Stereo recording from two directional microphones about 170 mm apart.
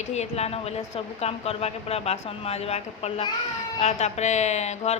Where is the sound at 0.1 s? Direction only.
40° left (ahead or behind).